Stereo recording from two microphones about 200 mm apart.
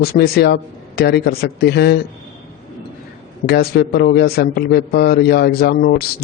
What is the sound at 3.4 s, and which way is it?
A man's voice, 55° left (ahead or behind).